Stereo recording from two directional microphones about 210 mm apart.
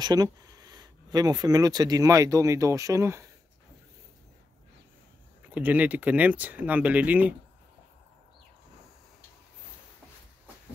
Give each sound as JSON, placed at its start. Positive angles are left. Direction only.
{"t": 0.0, "sound": "speech", "side_deg": -20}
{"t": 5.5, "sound": "speech", "side_deg": -10}